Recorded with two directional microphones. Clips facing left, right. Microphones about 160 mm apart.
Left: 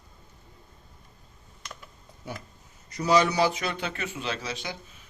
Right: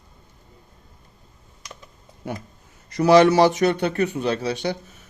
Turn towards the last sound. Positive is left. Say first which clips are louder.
# right 10 dB
turn(degrees=-50)  # may be behind; listen again after turning